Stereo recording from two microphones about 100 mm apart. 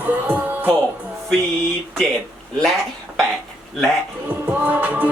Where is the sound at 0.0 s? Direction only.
15° right (ahead or behind).